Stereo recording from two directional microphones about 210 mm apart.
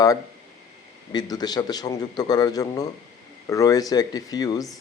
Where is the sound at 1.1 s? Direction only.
20° left (ahead or behind).